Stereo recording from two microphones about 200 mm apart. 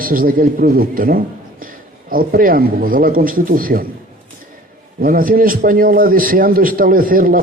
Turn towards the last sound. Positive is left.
turn(degrees=-45)  # may be behind; listen again after turning